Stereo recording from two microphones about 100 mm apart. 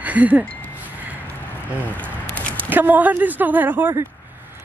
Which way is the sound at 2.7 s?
15° right (ahead or behind).